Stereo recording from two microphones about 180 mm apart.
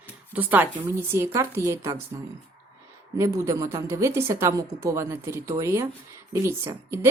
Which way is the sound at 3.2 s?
15° right (ahead or behind).